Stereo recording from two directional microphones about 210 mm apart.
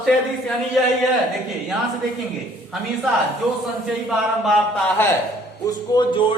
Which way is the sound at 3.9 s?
Centre (ahead or behind).